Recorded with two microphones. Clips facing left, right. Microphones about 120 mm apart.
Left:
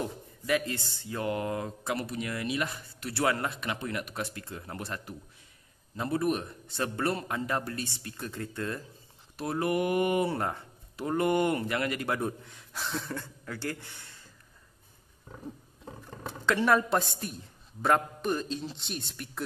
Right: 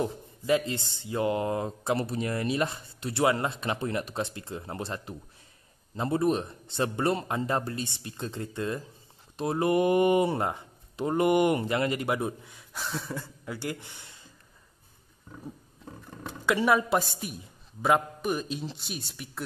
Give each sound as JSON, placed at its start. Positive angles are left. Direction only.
{"t": 0.0, "sound": "speech", "side_deg": -25}
{"t": 12.2, "sound": "speech", "side_deg": -5}
{"t": 16.4, "sound": "a woman's voice", "side_deg": -10}